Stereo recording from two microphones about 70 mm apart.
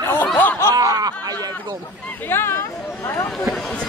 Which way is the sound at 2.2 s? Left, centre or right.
Left.